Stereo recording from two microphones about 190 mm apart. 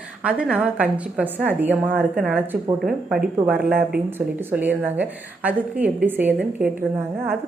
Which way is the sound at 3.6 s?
55° right (ahead or behind).